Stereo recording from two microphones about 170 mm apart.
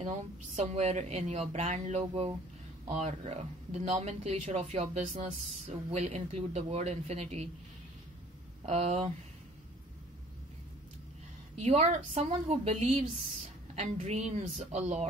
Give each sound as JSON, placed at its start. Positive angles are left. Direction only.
{"t": 0.0, "sound": "speech", "side_deg": -40}
{"t": 8.6, "sound": "speech", "side_deg": -40}
{"t": 11.6, "sound": "speech", "side_deg": -40}